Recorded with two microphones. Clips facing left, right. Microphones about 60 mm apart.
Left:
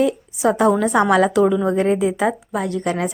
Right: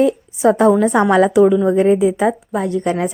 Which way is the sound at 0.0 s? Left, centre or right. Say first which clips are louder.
Right 4 dB; right.